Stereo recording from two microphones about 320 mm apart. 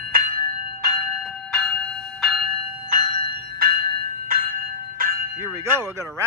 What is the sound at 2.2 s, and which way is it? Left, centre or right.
Bell, centre.